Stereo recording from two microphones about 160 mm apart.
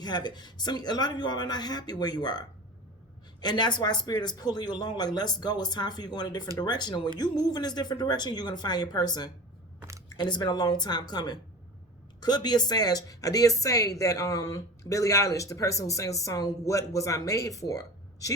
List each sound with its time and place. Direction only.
0.0 s speech: 25° left (ahead or behind)
3.4 s speech: 25° left (ahead or behind)